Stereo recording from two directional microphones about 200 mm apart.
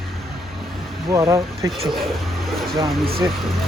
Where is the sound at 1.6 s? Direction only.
Centre (ahead or behind).